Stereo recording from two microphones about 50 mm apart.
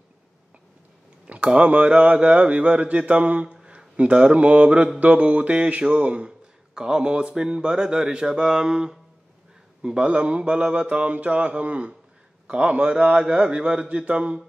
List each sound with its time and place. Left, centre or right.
1.2 s mantra: right
6.7 s speech: centre
9.8 s mantra: centre